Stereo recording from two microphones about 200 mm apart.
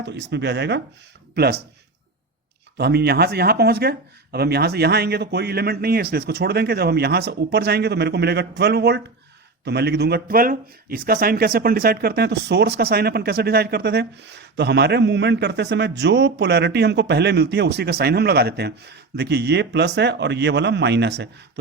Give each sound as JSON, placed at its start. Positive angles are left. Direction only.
{"t": 0.0, "sound": "speech", "side_deg": -60}
{"t": 2.7, "sound": "speech", "side_deg": -55}